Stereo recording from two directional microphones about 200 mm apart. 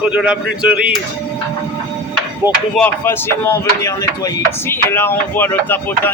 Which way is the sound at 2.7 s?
10° left (ahead or behind).